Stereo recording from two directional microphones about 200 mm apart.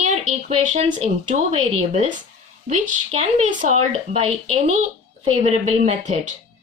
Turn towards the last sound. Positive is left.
turn(degrees=-35)  # may be behind; listen again after turning